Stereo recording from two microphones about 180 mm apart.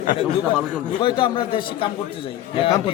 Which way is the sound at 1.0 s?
30° left (ahead or behind).